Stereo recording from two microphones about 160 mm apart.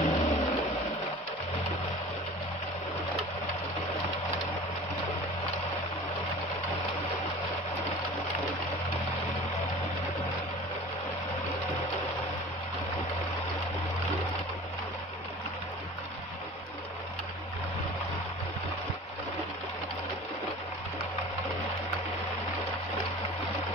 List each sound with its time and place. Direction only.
0.0 s vehicle: 40° left (ahead or behind)